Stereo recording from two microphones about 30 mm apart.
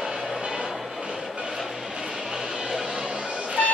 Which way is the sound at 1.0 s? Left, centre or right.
Right.